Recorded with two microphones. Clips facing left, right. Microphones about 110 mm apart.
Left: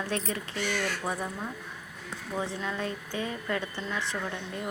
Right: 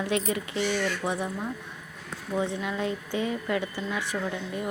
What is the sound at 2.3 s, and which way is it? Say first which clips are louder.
Speech: right 4 dB; 15° right (ahead or behind).